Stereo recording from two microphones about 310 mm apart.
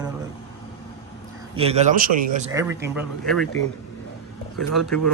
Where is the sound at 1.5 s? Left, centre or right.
Centre.